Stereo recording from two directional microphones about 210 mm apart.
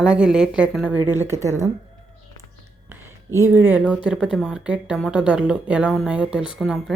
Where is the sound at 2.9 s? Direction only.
10° right (ahead or behind).